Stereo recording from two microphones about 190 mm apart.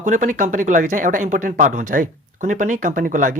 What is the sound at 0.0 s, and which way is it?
Speech, 40° right (ahead or behind).